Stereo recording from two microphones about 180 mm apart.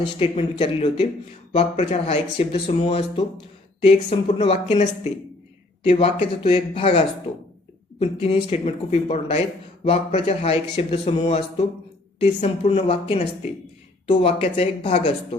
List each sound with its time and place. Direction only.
0.0 s speech: 30° left (ahead or behind)